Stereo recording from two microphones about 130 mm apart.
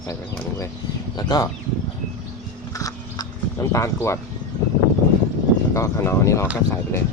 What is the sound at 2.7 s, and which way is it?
Horse, 25° left (ahead or behind).